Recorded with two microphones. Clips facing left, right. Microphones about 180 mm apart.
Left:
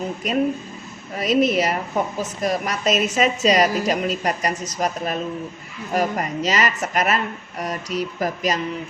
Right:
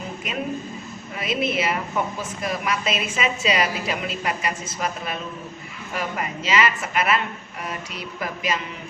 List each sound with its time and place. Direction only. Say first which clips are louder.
0.2 s a woman's voice: left 7 dB; 40° left (ahead or behind)